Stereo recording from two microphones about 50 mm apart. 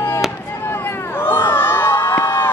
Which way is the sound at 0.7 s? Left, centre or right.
Left.